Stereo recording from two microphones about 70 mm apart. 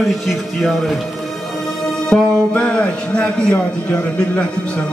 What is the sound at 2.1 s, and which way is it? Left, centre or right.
A man's voice, left.